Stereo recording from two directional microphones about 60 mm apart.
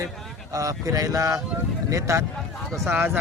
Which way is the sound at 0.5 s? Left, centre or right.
Right.